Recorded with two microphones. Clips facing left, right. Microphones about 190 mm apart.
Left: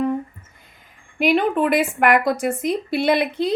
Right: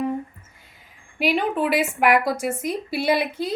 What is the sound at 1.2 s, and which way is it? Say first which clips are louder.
Speech: left 4 dB; 50° left (ahead or behind).